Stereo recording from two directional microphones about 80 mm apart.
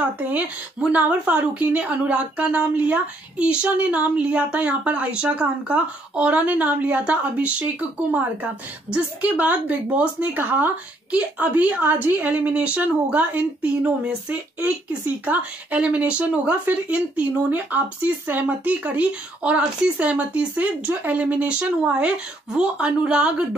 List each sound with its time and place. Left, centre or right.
0.0 s a woman's voice: right